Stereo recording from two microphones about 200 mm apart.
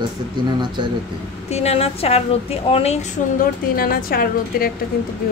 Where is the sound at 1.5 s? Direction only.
30° left (ahead or behind).